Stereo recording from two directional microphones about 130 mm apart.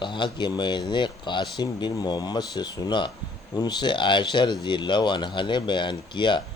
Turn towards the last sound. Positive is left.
turn(degrees=35)  # may be behind; listen again after turning